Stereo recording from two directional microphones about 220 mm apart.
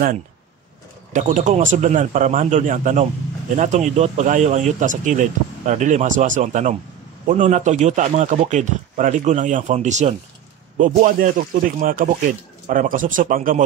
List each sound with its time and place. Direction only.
1.1 s speech: 35° right (ahead or behind)